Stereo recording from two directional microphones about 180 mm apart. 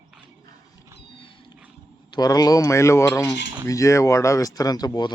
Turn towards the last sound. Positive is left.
turn(degrees=20)  # may be behind; listen again after turning